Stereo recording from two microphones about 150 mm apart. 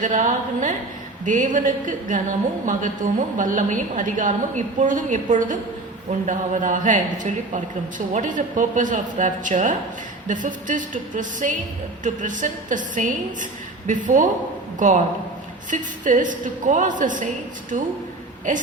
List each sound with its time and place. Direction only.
0.0 s speech: 60° right (ahead or behind)